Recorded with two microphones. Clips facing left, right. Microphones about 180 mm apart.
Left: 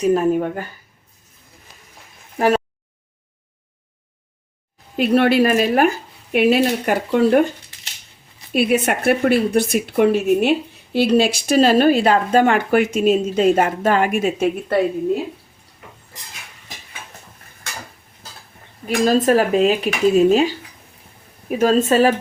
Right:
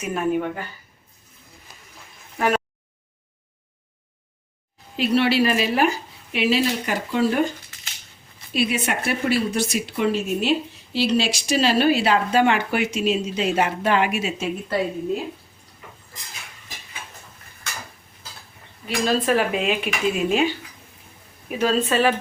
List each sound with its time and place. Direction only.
0.0 s speech: 35° left (ahead or behind)
4.9 s a woman's voice: 50° left (ahead or behind)
8.5 s a woman's voice: 55° left (ahead or behind)
18.9 s speech: 45° left (ahead or behind)
21.6 s speech: 45° left (ahead or behind)